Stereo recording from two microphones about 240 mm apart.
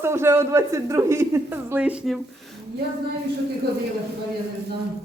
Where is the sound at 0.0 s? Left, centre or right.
Centre.